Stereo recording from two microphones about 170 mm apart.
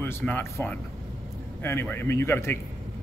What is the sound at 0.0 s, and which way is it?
Speech, 10° left (ahead or behind).